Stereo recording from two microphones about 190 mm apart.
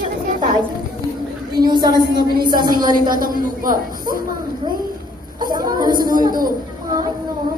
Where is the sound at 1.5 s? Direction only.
20° right (ahead or behind).